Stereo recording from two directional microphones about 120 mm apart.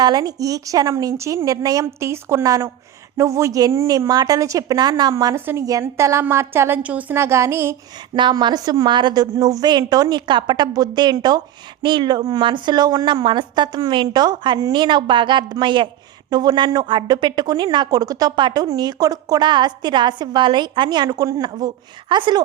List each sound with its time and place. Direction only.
0.0 s a woman's voice: 35° right (ahead or behind)
8.1 s a woman's voice: 40° right (ahead or behind)